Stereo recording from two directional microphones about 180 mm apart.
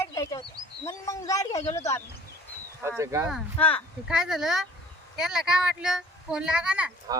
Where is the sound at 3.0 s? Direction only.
15° right (ahead or behind).